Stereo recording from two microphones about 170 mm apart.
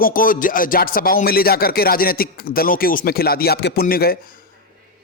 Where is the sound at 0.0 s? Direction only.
55° left (ahead or behind).